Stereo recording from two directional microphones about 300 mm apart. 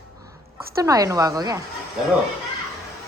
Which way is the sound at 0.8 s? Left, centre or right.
Centre.